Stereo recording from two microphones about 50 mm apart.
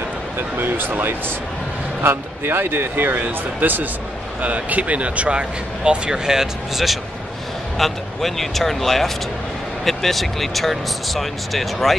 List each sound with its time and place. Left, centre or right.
0.4 s speech: right; by 7.0 s centre
7.7 s speech: centre